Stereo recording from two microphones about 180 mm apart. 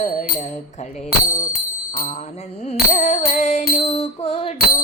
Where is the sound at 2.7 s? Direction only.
45° left (ahead or behind).